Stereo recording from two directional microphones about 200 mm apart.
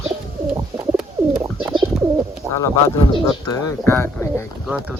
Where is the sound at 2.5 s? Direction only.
15° left (ahead or behind).